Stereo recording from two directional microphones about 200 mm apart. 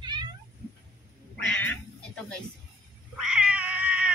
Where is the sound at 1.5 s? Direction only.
5° left (ahead or behind).